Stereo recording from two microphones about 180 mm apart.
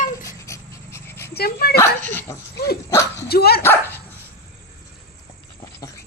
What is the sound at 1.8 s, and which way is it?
Speech, 10° left (ahead or behind).